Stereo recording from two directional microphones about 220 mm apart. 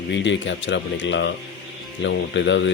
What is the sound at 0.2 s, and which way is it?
Speech, 55° left (ahead or behind).